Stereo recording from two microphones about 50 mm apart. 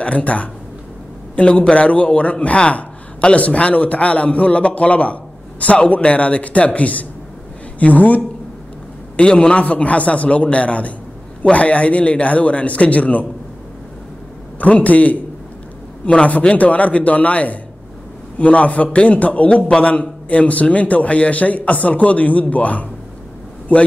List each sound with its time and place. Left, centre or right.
0.0 s a man's voice: left
9.1 s a man's voice: centre
14.6 s a man's voice: left